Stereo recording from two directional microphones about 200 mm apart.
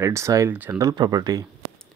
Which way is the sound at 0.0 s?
15° right (ahead or behind).